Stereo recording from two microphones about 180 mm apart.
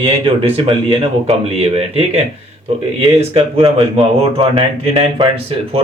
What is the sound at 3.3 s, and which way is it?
Speech, 30° right (ahead or behind).